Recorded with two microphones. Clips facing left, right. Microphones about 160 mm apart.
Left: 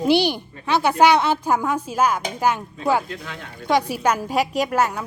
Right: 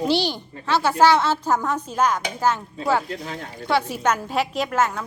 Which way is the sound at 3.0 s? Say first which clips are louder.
Right 3 dB; 35° right (ahead or behind).